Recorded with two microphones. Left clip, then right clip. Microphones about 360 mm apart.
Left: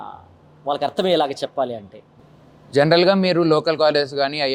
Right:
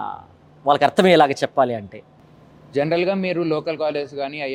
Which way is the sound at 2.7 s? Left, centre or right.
Left.